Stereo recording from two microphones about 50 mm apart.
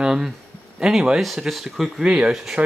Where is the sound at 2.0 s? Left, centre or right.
Centre.